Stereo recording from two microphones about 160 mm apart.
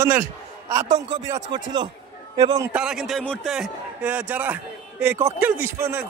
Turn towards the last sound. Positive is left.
turn(degrees=-10)  # may be behind; listen again after turning